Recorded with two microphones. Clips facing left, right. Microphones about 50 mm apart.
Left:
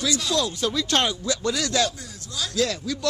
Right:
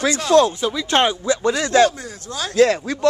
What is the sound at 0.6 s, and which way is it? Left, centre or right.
Speech, centre.